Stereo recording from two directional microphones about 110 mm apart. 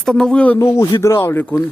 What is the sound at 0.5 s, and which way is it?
Speech, 25° left (ahead or behind).